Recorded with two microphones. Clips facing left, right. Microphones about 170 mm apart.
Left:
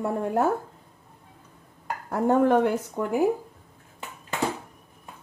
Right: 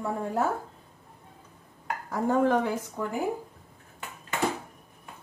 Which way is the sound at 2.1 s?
60° left (ahead or behind).